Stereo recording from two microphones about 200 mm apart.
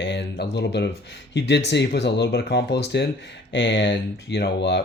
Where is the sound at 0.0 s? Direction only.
60° left (ahead or behind).